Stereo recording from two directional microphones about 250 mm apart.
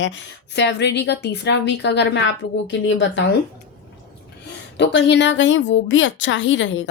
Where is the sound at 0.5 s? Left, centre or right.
Left.